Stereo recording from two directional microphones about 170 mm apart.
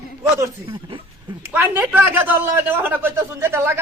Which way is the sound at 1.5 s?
10° right (ahead or behind).